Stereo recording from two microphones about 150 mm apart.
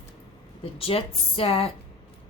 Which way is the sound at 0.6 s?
40° left (ahead or behind).